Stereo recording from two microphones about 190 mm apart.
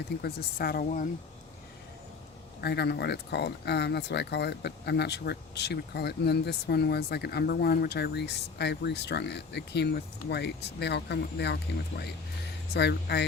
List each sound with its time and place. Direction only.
0.2 s speech: 55° left (ahead or behind)
2.6 s speech: 60° left (ahead or behind)